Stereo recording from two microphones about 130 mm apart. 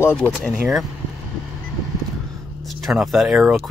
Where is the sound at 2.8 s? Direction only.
Centre (ahead or behind).